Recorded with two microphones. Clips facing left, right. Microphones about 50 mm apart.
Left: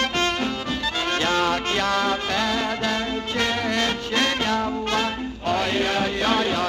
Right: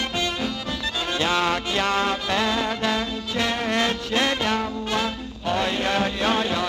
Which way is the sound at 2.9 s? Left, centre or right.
Left.